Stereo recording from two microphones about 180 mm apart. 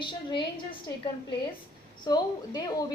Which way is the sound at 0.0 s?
25° left (ahead or behind).